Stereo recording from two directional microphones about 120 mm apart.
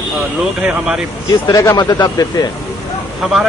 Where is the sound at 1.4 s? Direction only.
30° left (ahead or behind).